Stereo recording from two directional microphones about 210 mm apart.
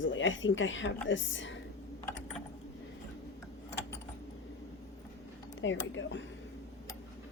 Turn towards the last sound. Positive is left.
turn(degrees=60)  # may be behind; listen again after turning